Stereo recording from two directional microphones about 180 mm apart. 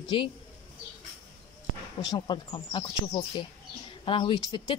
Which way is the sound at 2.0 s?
25° left (ahead or behind).